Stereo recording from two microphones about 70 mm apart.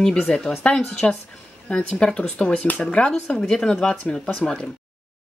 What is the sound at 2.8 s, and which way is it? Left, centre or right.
A woman's voice, centre.